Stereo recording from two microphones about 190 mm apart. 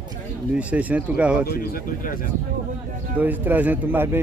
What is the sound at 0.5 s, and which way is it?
Speech, 10° right (ahead or behind).